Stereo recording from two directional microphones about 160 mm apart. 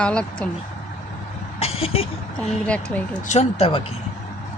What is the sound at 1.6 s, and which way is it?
Vehicle, 40° left (ahead or behind).